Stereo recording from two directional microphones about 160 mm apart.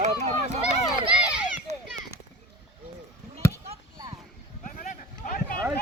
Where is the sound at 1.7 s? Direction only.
45° right (ahead or behind).